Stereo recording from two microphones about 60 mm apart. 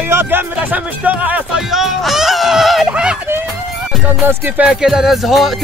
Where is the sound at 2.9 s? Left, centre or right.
Centre.